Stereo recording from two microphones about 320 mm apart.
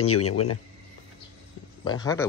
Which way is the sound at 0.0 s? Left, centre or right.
Left.